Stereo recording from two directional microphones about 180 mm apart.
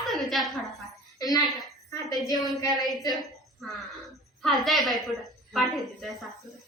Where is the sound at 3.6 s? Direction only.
Centre (ahead or behind).